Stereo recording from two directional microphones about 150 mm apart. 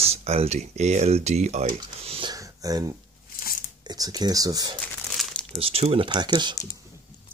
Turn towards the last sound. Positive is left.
turn(degrees=-30)  # may be behind; listen again after turning